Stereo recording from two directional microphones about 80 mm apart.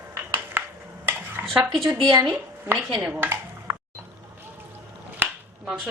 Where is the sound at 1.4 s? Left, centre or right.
Right.